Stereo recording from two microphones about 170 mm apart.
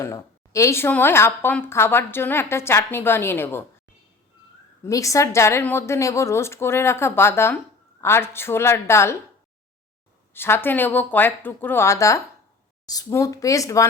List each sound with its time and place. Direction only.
0.0 s a woman's voice: 15° left (ahead or behind)
4.9 s a woman's voice: 20° left (ahead or behind)
10.3 s a woman's voice: 15° left (ahead or behind)